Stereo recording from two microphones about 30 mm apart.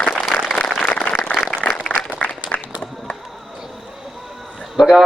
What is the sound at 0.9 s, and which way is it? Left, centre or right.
Applause, left.